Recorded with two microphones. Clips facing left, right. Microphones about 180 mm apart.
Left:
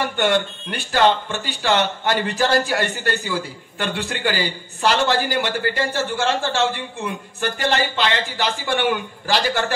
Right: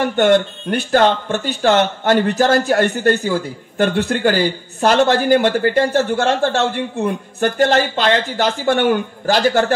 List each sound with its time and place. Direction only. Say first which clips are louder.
0.0 s speech: right 6 dB; 50° right (ahead or behind)